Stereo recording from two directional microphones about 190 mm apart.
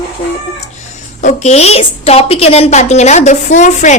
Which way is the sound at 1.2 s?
35° left (ahead or behind).